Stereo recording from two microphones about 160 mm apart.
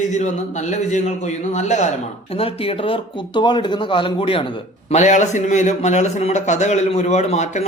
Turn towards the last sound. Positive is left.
turn(degrees=45)  # may be behind; listen again after turning